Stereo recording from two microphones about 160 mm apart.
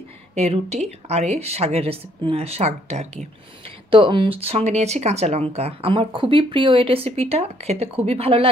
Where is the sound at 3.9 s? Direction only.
30° right (ahead or behind).